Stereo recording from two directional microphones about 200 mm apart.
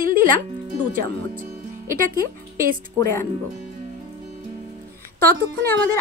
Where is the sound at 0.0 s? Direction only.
45° right (ahead or behind).